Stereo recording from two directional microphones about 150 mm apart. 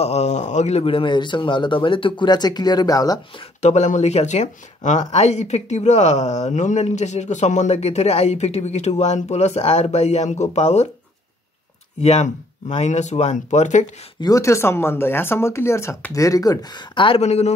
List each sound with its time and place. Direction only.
0.0 s speech: 45° left (ahead or behind); by 3.2 s 25° left (ahead or behind)
3.6 s speech: 50° left (ahead or behind)
12.0 s speech: 50° left (ahead or behind)
14.2 s speech: 20° left (ahead or behind)
17.2 s speech: 45° left (ahead or behind)